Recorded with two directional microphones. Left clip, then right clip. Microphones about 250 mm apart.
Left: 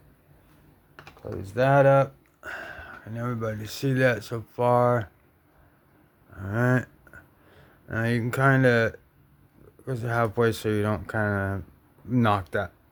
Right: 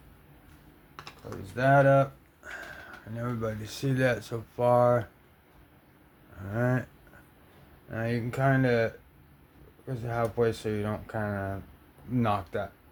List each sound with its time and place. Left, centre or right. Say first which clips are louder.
1.5 s speech: left 3 dB; left
6.3 s speech: left 4 dB; left
7.9 s speech: left 5 dB; left